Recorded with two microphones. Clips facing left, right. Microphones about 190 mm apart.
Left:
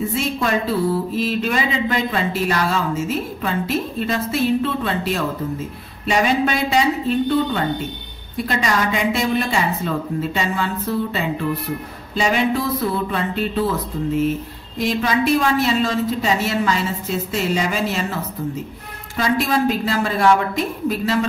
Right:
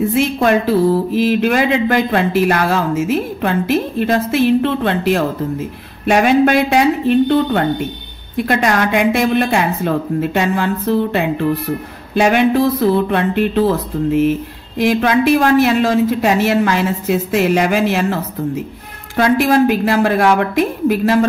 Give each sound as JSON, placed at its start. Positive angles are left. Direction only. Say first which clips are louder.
{"t": 0.1, "sound": "a woman's voice", "louder": "right 7 dB", "side_deg": -60}
{"t": 4.0, "sound": "a woman's voice", "louder": "right 6 dB", "side_deg": -60}
{"t": 14.8, "sound": "a woman's voice", "louder": "right 6 dB", "side_deg": -60}
{"t": 19.1, "sound": "a woman's voice", "louder": "right 7 dB", "side_deg": -60}